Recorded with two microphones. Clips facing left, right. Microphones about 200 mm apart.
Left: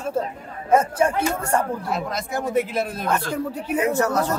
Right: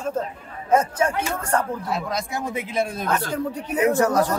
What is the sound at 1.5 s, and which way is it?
A man's voice, centre (ahead or behind).